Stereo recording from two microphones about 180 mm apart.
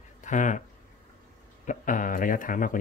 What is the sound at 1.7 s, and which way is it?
Speech, 45° left (ahead or behind).